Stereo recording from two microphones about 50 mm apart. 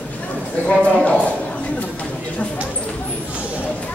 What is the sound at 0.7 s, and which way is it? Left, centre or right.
Speech, centre.